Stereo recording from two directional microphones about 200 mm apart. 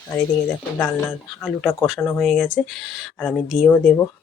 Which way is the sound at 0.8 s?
10° left (ahead or behind).